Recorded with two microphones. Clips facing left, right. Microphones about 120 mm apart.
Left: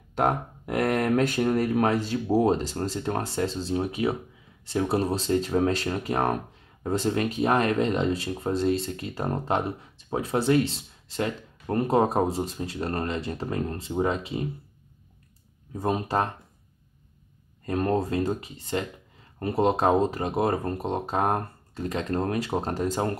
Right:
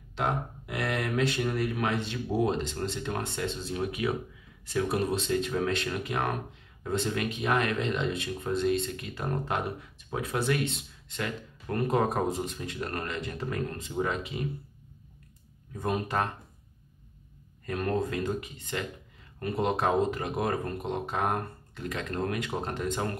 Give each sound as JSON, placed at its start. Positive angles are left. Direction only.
{"t": 0.1, "sound": "speech", "side_deg": 45}
{"t": 15.7, "sound": "speech", "side_deg": 30}
{"t": 17.6, "sound": "speech", "side_deg": 30}